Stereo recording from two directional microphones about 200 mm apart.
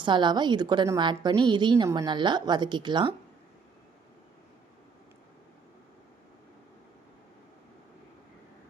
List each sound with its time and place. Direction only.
0.0 s a woman's voice: 25° right (ahead or behind)